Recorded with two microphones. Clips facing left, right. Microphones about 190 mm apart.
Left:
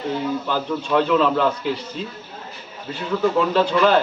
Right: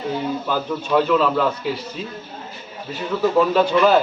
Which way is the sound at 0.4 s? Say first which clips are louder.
Even; 5° right (ahead or behind).